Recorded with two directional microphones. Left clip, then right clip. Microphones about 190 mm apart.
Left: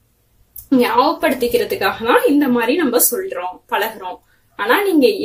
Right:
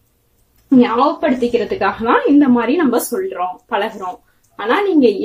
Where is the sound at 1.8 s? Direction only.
25° right (ahead or behind).